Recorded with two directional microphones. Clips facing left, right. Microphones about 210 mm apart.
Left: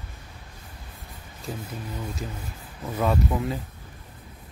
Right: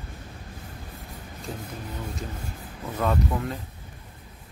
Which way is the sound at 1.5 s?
5° left (ahead or behind).